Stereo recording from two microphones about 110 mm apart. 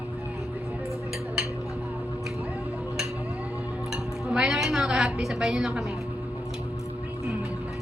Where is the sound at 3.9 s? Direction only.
5° right (ahead or behind).